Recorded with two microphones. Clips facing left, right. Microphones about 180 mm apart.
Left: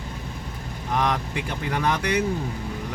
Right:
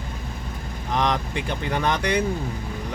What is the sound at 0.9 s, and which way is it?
Speech, 5° left (ahead or behind).